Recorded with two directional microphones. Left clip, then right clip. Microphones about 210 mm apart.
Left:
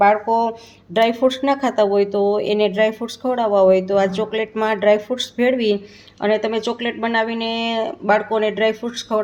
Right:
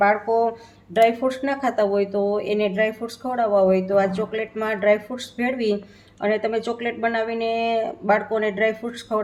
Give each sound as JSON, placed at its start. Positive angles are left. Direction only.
{"t": 0.9, "sound": "speech", "side_deg": 40}